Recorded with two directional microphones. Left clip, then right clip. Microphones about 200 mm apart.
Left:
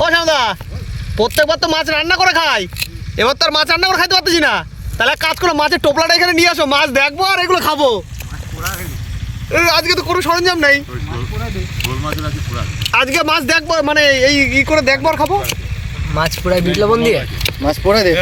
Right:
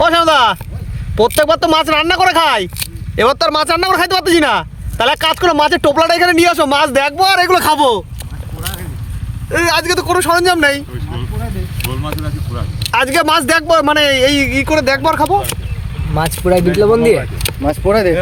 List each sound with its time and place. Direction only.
0.0 s a sound: 30° right (ahead or behind)
1.1 s speech: 30° right (ahead or behind)
7.2 s speech: 10° right (ahead or behind)
9.5 s speech: 15° right (ahead or behind)
11.9 s speech: 10° right (ahead or behind)
16.1 s speech: 50° right (ahead or behind)
17.3 s speech: centre (ahead or behind)